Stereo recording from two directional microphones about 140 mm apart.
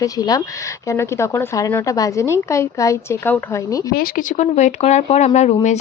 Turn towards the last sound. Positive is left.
turn(degrees=55)  # may be behind; listen again after turning